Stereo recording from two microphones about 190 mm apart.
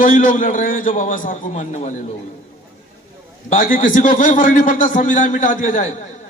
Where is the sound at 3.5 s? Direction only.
45° left (ahead or behind).